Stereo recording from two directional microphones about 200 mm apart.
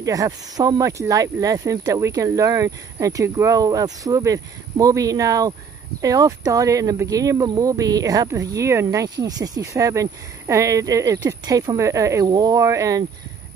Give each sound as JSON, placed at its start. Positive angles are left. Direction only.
{"t": 0.0, "sound": "speech", "side_deg": -15}